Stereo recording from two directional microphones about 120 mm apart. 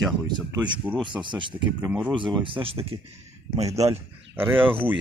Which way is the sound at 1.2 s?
40° right (ahead or behind).